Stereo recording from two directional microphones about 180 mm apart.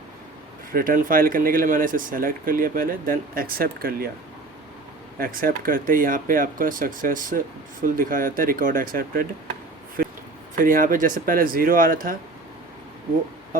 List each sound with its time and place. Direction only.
0.7 s speech: 50° right (ahead or behind)
5.2 s speech: 50° right (ahead or behind)
10.5 s speech: 50° right (ahead or behind)